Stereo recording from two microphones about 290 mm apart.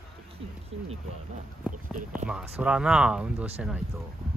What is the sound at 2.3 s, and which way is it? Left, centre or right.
Speech, centre.